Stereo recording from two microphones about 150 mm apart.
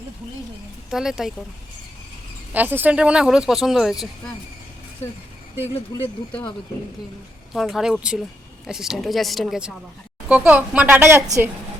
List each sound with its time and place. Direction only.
0.9 s speech: 5° right (ahead or behind)
2.5 s speech: 10° right (ahead or behind)
5.9 s speech: 25° left (ahead or behind)
7.5 s a woman's voice: centre (ahead or behind); by 11.4 s 15° right (ahead or behind)